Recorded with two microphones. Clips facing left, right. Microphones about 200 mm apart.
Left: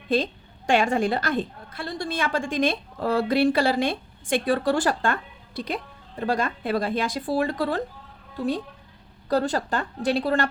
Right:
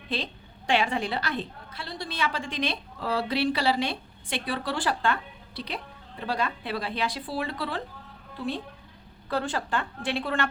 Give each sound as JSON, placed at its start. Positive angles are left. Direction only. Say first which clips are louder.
{"t": 0.1, "sound": "a woman's voice", "louder": "left 9 dB", "side_deg": 45}